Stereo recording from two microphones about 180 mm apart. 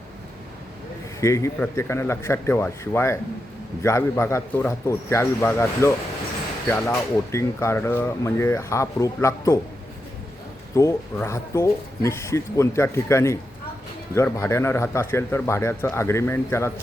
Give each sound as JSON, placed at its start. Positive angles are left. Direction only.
{"t": 1.2, "sound": "speech", "side_deg": 15}
{"t": 10.8, "sound": "speech", "side_deg": 15}